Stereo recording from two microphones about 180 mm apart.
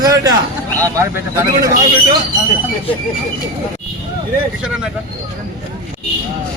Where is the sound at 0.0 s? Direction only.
20° right (ahead or behind).